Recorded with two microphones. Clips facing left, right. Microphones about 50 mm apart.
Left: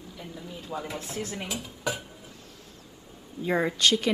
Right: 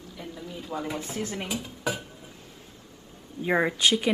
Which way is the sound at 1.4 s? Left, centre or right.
Centre.